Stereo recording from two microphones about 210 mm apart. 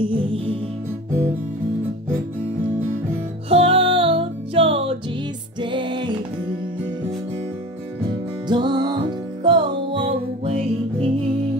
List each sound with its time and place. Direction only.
0.0 s music: 25° right (ahead or behind)
3.4 s music: 25° right (ahead or behind)
8.5 s music: 20° right (ahead or behind)